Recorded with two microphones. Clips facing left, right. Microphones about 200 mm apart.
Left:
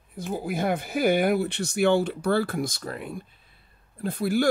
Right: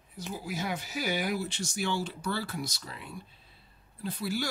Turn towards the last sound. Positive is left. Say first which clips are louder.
# left 9 dB
turn(degrees=55)  # may be behind; listen again after turning